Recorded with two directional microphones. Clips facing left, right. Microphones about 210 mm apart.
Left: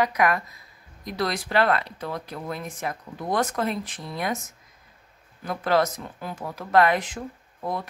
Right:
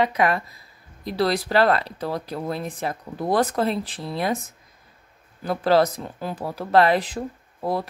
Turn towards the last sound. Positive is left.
turn(degrees=-35)  # may be behind; listen again after turning